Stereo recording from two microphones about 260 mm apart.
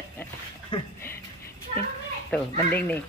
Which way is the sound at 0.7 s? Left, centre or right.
Centre.